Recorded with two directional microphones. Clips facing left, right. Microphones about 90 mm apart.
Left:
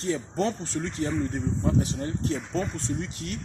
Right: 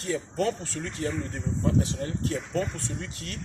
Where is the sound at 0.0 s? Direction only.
25° left (ahead or behind).